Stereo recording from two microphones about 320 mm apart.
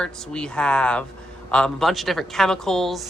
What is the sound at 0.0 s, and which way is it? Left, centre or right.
A woman's voice, centre.